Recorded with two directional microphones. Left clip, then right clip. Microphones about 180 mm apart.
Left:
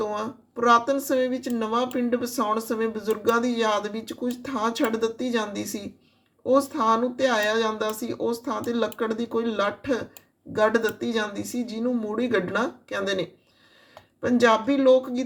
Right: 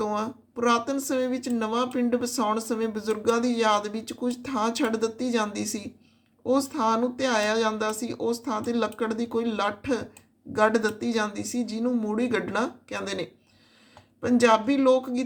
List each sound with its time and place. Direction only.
0.0 s speech: 15° right (ahead or behind)